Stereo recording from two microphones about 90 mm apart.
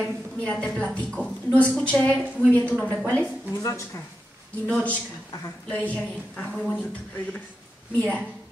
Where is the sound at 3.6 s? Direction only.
35° left (ahead or behind).